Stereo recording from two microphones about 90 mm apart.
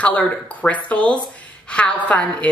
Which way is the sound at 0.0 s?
15° left (ahead or behind).